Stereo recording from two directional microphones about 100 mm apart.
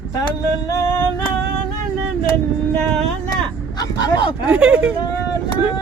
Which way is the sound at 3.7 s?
45° left (ahead or behind).